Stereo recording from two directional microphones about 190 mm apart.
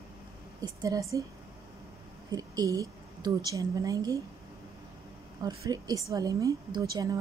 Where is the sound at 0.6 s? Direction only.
15° right (ahead or behind).